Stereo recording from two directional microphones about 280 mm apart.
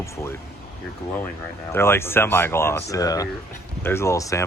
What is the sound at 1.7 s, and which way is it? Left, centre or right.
Speech, centre.